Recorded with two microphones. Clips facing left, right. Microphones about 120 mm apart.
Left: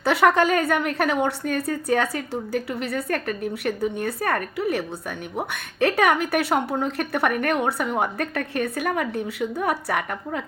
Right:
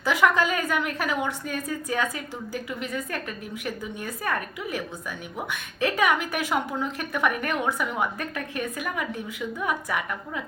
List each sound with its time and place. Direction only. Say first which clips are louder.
0.0 s a woman's voice: left 4 dB; 65° left (ahead or behind)
0.7 s a woman's voice: left 4 dB; 45° left (ahead or behind)
0.9 s a woman's voice: left 5 dB; 55° left (ahead or behind)
7.2 s a woman's voice: left 3 dB; 45° left (ahead or behind)